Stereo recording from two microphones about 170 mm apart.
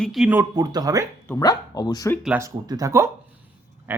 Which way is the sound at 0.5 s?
25° right (ahead or behind).